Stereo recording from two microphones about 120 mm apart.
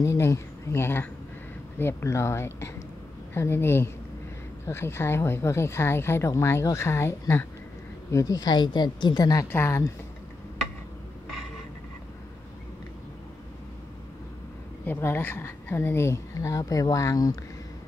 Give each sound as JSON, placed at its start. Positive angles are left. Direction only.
{"t": 0.0, "sound": "a woman's voice", "side_deg": 25}
{"t": 9.5, "sound": "a woman's voice", "side_deg": 20}
{"t": 14.9, "sound": "a woman's voice", "side_deg": 20}